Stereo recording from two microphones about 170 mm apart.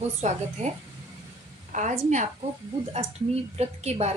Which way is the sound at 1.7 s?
45° right (ahead or behind).